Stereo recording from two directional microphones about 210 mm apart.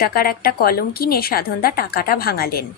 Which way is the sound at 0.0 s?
45° left (ahead or behind).